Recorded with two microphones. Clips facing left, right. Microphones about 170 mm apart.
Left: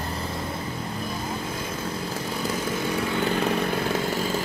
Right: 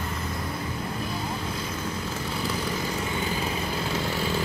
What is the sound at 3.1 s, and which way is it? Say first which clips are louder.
Vehicle: left 5 dB; 65° left (ahead or behind).